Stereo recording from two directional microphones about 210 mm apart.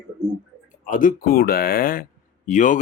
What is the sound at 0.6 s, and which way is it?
Speech, 40° left (ahead or behind).